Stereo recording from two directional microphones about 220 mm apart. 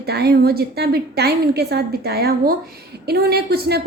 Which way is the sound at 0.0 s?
45° right (ahead or behind).